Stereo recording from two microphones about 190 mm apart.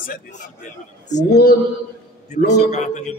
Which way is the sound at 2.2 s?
40° left (ahead or behind).